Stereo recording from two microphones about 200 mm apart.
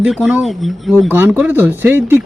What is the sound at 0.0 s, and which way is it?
Speech, 5° right (ahead or behind).